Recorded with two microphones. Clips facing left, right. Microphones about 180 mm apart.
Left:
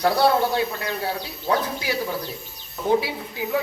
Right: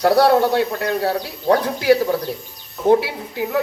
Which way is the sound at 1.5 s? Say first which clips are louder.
Right 9 dB; 70° right (ahead or behind).